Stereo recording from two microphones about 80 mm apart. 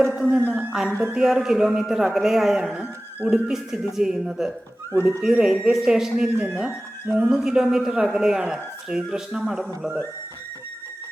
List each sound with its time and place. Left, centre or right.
0.0 s a sound: centre
0.3 s a man's voice: centre
2.8 s a man's voice: centre